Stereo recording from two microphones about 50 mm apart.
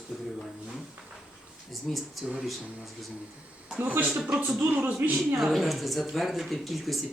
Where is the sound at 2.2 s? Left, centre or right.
Centre.